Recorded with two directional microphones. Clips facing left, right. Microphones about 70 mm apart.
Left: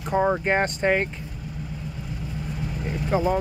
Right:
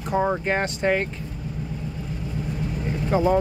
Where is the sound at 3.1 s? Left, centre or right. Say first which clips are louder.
Right 2 dB; centre.